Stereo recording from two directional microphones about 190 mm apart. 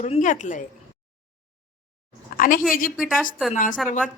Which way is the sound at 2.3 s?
45° left (ahead or behind).